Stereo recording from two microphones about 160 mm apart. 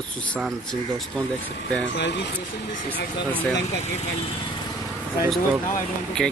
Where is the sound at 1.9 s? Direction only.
90° left.